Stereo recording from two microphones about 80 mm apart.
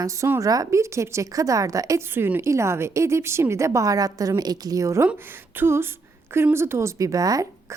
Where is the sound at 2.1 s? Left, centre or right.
Right.